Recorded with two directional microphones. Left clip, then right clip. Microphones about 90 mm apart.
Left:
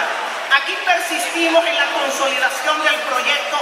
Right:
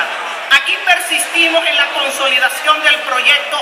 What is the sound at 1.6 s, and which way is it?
A man's voice, 35° right (ahead or behind).